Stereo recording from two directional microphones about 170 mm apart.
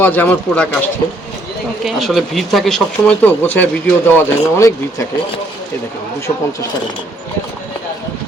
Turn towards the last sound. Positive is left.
turn(degrees=15)  # may be behind; listen again after turning